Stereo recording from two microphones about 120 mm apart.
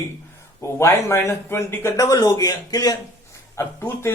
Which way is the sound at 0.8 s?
25° left (ahead or behind).